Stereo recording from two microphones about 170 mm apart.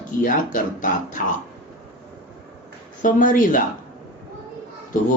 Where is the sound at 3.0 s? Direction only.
50° left (ahead or behind).